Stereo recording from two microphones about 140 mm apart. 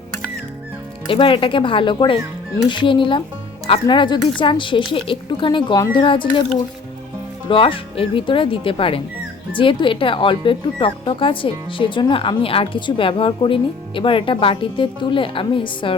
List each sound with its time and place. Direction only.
1.0 s speech: 35° left (ahead or behind)
7.4 s speech: 40° left (ahead or behind)